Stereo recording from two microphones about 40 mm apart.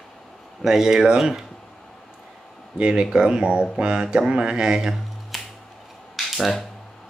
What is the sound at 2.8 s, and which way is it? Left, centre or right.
Speech, right.